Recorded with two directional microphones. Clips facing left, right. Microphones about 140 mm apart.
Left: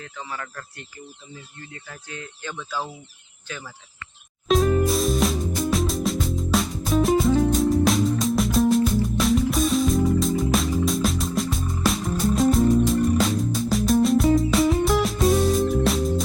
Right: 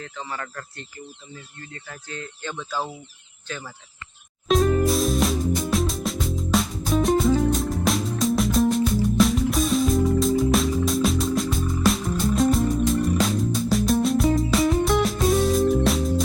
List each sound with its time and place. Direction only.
0.0 s speech: 5° left (ahead or behind)
1.9 s speech: 10° left (ahead or behind)
2.5 s speech: 15° right (ahead or behind)
4.4 s music: centre (ahead or behind)